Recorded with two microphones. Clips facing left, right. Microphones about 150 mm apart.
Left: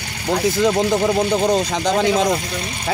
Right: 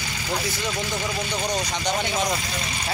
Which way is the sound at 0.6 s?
80° left.